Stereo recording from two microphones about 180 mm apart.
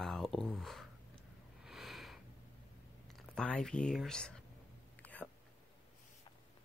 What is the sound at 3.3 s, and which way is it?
Speech, 5° left (ahead or behind).